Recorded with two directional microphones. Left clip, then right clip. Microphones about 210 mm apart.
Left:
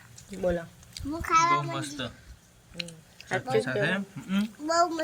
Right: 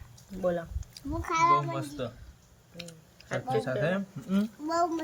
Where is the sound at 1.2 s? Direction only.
5° left (ahead or behind).